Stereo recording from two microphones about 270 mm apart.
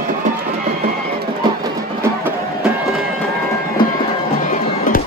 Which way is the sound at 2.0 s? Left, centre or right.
Centre.